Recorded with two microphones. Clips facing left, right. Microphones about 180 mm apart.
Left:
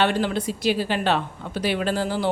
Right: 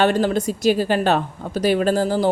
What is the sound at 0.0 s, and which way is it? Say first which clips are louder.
Speech: right 4 dB; 45° right (ahead or behind).